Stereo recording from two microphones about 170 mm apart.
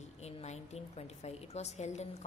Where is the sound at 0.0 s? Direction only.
40° left (ahead or behind).